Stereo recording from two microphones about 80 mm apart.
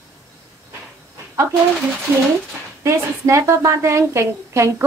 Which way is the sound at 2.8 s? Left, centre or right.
Right.